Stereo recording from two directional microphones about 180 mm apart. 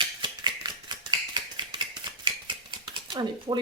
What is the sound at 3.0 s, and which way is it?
Speech, 25° right (ahead or behind).